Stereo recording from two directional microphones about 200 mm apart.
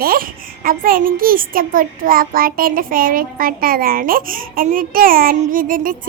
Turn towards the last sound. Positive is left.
turn(degrees=-45)  # may be behind; listen again after turning